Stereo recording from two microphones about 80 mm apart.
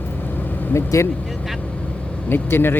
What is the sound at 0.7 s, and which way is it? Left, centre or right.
Speech, left.